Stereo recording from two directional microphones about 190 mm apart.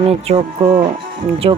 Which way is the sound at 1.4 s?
30° right (ahead or behind).